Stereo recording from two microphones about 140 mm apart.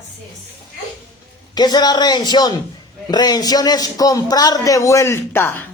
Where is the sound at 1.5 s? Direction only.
30° left (ahead or behind).